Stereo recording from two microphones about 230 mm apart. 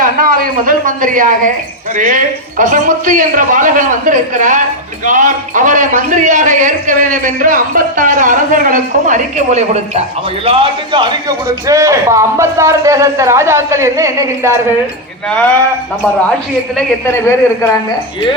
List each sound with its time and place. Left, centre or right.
0.0 s a woman's voice: right; by 14.6 s centre
17.2 s speech: centre